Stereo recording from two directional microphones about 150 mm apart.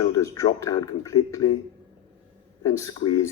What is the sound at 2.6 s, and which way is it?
Speech, 25° left (ahead or behind).